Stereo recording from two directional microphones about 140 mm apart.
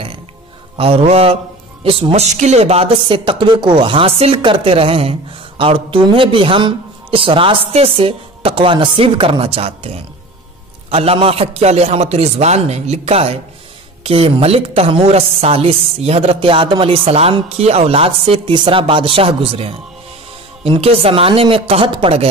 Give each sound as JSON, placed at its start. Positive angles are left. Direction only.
{"t": 0.7, "sound": "a woman's voice", "side_deg": -45}